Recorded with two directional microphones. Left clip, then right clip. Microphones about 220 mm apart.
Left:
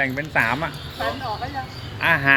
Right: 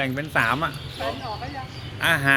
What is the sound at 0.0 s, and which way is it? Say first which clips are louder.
Speech: left 2 dB; 20° right (ahead or behind).